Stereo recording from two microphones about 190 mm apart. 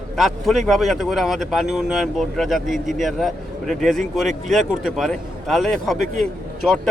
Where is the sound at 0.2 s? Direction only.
Centre (ahead or behind).